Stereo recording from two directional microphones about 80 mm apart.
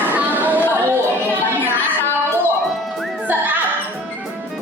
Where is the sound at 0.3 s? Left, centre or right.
Right.